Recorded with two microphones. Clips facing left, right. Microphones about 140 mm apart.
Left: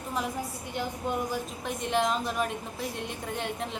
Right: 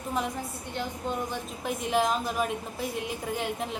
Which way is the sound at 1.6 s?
Centre (ahead or behind).